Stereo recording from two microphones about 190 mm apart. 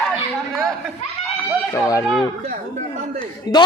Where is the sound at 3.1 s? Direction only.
25° left (ahead or behind).